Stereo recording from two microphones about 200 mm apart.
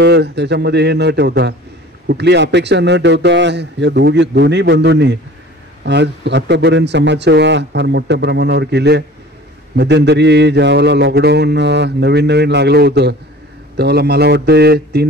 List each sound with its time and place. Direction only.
0.0 s a man's voice: 55° right (ahead or behind)